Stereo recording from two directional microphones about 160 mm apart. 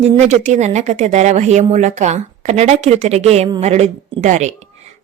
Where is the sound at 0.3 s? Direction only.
45° right (ahead or behind).